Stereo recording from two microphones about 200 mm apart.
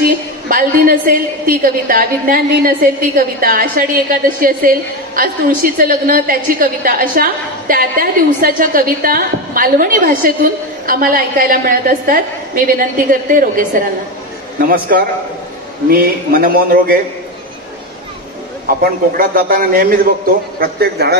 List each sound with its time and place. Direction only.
0.5 s a woman's voice: 45° right (ahead or behind)
18.8 s a woman's voice: 45° right (ahead or behind)